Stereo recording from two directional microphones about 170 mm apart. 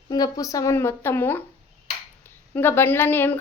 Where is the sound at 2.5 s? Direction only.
10° left (ahead or behind).